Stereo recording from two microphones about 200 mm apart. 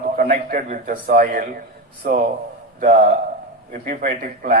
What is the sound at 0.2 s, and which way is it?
A man's voice, 45° right (ahead or behind).